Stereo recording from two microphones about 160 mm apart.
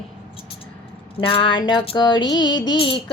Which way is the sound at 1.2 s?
35° left (ahead or behind).